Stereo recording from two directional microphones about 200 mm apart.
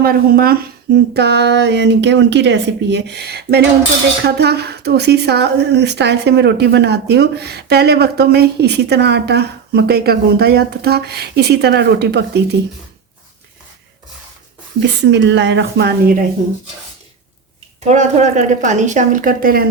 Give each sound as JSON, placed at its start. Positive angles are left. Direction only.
{"t": 0.0, "sound": "a woman's voice", "side_deg": -45}
{"t": 14.8, "sound": "a woman's voice", "side_deg": -60}
{"t": 17.7, "sound": "a woman's voice", "side_deg": -35}